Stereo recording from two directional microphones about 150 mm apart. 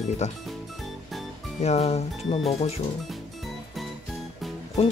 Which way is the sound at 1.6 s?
45° left (ahead or behind).